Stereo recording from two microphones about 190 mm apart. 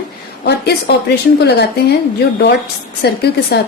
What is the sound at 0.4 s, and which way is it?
A woman's voice, 60° left (ahead or behind).